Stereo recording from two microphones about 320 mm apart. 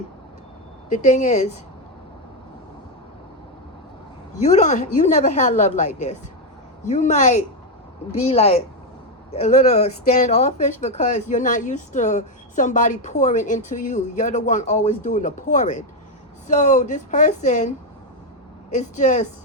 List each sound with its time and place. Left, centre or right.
0.9 s speech: left
4.4 s speech: left
18.7 s speech: left